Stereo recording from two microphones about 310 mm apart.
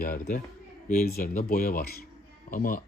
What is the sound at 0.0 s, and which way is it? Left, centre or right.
Speech, left.